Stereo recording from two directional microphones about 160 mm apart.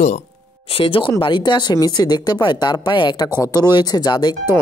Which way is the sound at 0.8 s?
35° left (ahead or behind).